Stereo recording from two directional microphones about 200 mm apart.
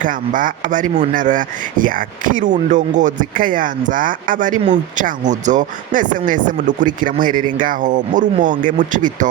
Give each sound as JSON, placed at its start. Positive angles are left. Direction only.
{"t": 0.0, "sound": "speech", "side_deg": -40}